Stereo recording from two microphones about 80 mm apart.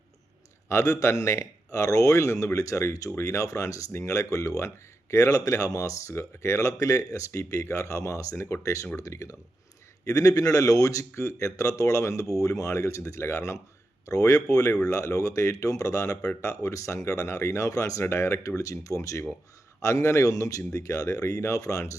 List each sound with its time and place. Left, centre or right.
0.7 s speech: left